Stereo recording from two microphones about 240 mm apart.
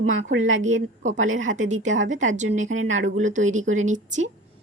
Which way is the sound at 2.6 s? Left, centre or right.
Right.